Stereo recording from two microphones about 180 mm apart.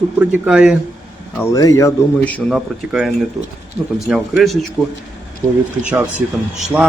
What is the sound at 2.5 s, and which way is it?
Speech, centre (ahead or behind).